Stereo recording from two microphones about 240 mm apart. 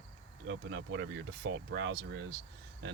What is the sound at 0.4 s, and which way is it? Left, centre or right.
Speech, right.